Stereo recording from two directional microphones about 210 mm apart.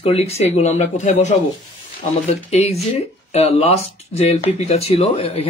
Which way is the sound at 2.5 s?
30° left (ahead or behind).